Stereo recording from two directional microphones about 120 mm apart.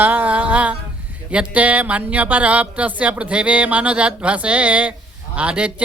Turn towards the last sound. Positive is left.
turn(degrees=-10)  # may be behind; listen again after turning